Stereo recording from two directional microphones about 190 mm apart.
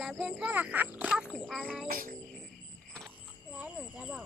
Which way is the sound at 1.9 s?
50° right (ahead or behind).